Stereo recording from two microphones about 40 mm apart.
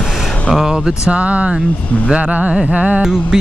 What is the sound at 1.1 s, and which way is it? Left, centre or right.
Speech, right.